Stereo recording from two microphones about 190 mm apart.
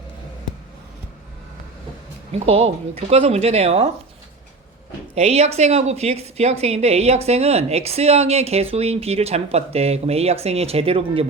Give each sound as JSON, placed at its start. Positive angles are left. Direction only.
{"t": 2.3, "sound": "a woman's voice", "side_deg": -30}
{"t": 5.1, "sound": "a woman's voice", "side_deg": -35}